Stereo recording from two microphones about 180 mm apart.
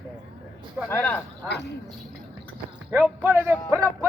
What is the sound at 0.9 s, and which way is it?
Speech, 10° left (ahead or behind).